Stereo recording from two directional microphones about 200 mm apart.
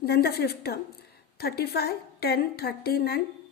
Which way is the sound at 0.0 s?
50° left (ahead or behind).